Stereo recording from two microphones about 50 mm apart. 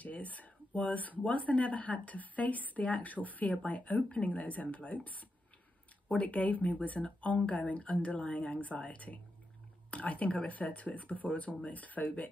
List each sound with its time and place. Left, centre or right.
0.0 s speech: left